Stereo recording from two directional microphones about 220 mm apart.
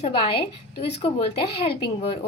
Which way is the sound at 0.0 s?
25° left (ahead or behind).